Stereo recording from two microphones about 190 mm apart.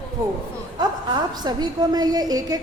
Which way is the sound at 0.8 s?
20° right (ahead or behind).